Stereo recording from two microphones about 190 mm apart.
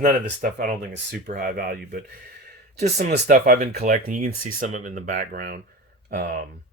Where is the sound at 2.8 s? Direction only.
35° right (ahead or behind).